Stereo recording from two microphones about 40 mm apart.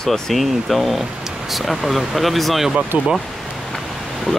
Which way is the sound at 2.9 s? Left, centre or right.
Right.